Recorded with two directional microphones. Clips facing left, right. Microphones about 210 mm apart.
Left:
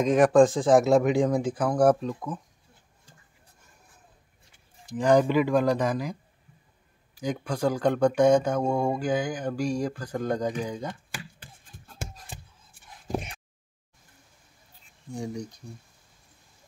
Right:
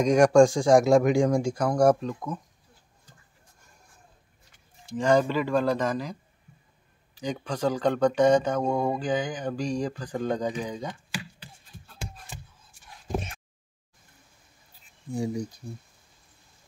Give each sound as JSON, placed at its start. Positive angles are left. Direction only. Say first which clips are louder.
{"t": 0.0, "sound": "speech", "louder": "right 1 dB", "side_deg": 0}
{"t": 5.0, "sound": "speech", "louder": "left 2 dB", "side_deg": 15}
{"t": 7.2, "sound": "speech", "louder": "left 1 dB", "side_deg": 10}
{"t": 11.1, "sound": "a sound", "louder": "right 4 dB", "side_deg": 50}
{"t": 15.1, "sound": "speech", "louder": "right 4 dB", "side_deg": -5}